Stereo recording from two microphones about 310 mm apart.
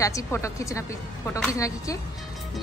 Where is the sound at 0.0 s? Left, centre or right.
Centre.